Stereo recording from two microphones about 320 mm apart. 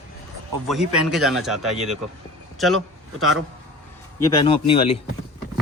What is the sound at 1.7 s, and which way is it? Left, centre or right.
Speech, centre.